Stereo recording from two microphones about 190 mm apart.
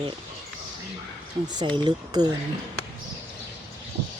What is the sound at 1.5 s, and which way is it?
Speech, 25° right (ahead or behind).